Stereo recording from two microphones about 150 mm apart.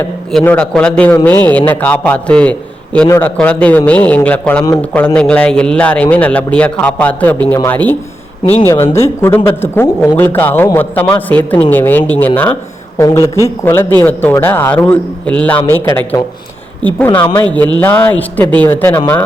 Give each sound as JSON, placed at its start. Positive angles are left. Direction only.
{"t": 0.3, "sound": "a man's voice", "side_deg": 5}
{"t": 17.5, "sound": "a man's voice", "side_deg": 10}